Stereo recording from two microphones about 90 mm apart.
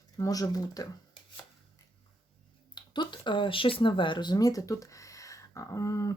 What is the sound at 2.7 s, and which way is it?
Speech, 55° left (ahead or behind).